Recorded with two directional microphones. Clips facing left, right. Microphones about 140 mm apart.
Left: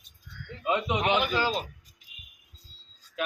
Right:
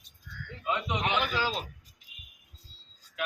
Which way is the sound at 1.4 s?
Centre (ahead or behind).